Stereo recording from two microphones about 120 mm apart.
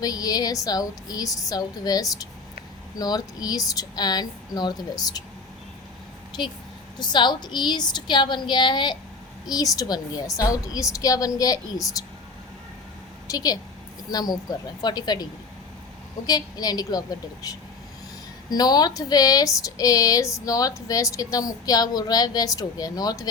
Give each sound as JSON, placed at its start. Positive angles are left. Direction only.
{"t": 0.0, "sound": "speech", "side_deg": 30}
{"t": 7.0, "sound": "speech", "side_deg": 40}
{"t": 13.2, "sound": "a woman's voice", "side_deg": 30}